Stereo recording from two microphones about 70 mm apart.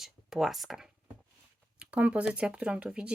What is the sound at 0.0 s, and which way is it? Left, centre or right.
Speech, centre.